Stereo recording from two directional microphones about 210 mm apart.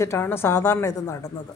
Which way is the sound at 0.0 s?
10° left (ahead or behind).